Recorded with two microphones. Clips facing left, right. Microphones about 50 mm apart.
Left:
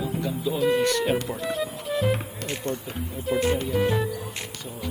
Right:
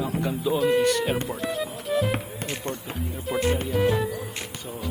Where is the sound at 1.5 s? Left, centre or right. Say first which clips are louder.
Right 1 dB; centre.